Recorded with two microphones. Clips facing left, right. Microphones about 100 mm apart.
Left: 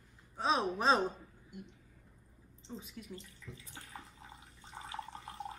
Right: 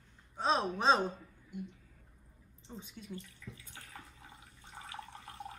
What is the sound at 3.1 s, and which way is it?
Bathtub, 30° left (ahead or behind).